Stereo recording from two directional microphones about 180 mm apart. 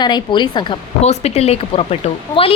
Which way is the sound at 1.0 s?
35° left (ahead or behind).